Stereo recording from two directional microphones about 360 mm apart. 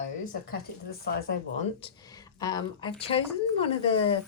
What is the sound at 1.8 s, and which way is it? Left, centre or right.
A woman's voice, centre.